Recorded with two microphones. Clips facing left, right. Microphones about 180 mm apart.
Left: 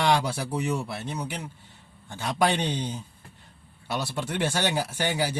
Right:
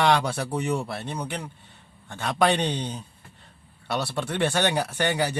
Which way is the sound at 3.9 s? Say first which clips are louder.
Right 2 dB; 65° right (ahead or behind).